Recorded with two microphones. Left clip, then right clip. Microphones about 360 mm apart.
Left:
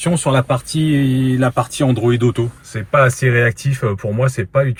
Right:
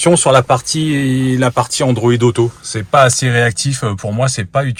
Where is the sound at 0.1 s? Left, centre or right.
Right.